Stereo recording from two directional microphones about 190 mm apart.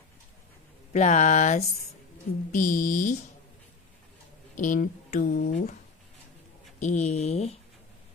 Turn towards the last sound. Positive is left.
turn(degrees=35)  # may be behind; listen again after turning